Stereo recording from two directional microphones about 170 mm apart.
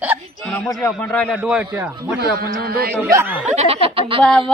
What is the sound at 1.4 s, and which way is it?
Speech, 5° right (ahead or behind).